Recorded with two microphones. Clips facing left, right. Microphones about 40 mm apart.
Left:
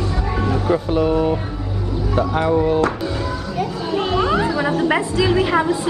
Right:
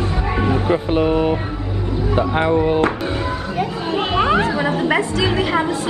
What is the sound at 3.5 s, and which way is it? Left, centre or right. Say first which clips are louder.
Chatter: even; right.